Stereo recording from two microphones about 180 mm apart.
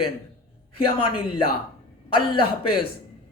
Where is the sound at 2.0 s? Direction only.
30° left (ahead or behind).